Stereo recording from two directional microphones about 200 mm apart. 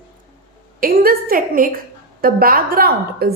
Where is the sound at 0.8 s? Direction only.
45° right (ahead or behind).